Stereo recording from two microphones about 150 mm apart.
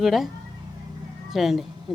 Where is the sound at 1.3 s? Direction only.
Centre (ahead or behind).